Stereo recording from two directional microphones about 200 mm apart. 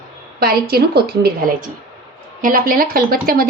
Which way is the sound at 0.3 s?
50° right (ahead or behind).